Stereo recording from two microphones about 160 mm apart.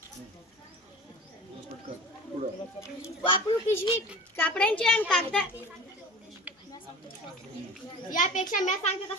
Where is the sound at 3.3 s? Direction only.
35° left (ahead or behind).